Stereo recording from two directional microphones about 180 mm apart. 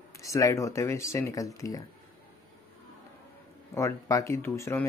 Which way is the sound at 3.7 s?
15° left (ahead or behind).